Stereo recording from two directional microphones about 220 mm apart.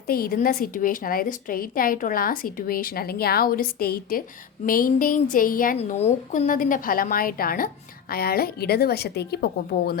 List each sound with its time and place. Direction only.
0.1 s a woman's voice: 40° left (ahead or behind)